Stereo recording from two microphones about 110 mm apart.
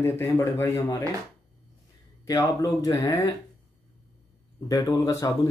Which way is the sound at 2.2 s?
30° left (ahead or behind).